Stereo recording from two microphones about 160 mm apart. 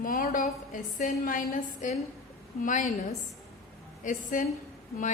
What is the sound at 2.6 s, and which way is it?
A woman's voice, 50° left (ahead or behind).